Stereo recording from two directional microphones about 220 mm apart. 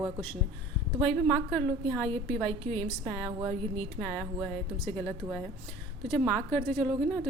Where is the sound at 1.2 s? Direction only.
5° left (ahead or behind).